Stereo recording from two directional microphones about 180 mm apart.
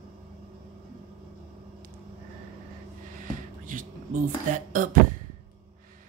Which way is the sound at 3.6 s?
50° right (ahead or behind).